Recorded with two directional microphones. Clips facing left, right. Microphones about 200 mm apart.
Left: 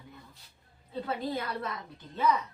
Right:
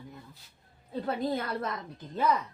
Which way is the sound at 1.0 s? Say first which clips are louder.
Right 3 dB; 45° right (ahead or behind).